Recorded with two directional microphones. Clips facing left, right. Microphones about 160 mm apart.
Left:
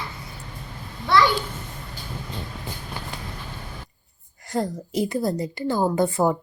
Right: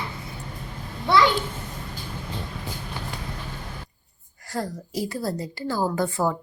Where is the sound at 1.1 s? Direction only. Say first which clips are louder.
Even; 20° right (ahead or behind).